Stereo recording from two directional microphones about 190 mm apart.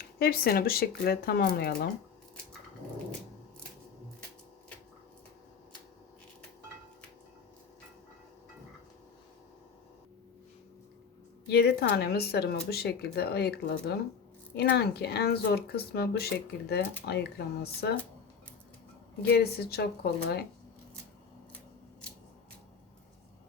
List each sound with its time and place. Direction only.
0.0 s speech: 50° left (ahead or behind)
11.4 s speech: 60° left (ahead or behind)
19.2 s speech: 55° left (ahead or behind)